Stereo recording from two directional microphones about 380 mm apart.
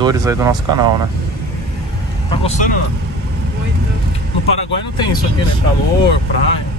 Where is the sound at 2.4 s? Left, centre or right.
Centre.